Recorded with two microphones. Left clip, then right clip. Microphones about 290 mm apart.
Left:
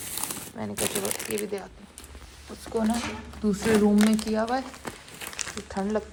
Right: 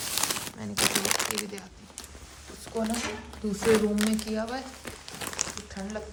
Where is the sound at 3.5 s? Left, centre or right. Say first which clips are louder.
Left 1 dB; centre.